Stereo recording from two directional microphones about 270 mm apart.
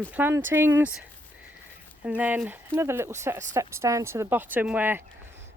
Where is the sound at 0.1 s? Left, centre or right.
Centre.